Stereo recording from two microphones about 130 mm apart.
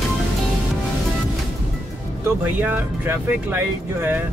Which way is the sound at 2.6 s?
10° right (ahead or behind).